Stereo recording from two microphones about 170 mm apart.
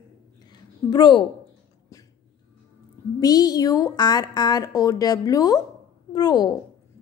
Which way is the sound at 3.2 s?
20° left (ahead or behind).